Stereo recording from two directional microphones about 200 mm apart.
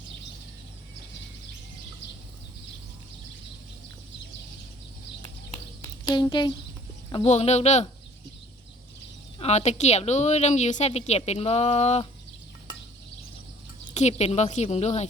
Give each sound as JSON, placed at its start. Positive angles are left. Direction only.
{"t": 5.8, "sound": "a sound", "side_deg": 20}
{"t": 7.1, "sound": "a woman's voice", "side_deg": 30}
{"t": 9.4, "sound": "a woman's voice", "side_deg": 35}
{"t": 13.9, "sound": "a woman's voice", "side_deg": 35}